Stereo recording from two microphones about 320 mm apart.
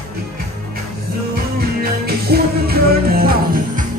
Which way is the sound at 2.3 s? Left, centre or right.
Right.